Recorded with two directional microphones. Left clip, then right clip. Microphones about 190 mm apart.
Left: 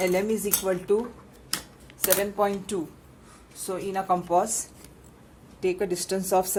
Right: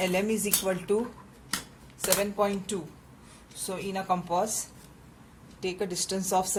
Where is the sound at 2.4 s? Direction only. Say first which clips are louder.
Left 3 dB; 20° left (ahead or behind).